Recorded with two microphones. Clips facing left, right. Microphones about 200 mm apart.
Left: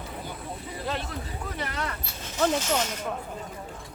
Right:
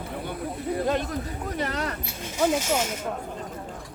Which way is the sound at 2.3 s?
10° right (ahead or behind).